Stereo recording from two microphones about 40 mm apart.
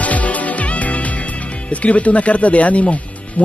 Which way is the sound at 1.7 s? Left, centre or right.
Left.